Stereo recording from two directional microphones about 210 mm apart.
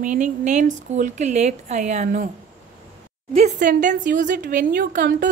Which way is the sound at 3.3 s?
35° right (ahead or behind).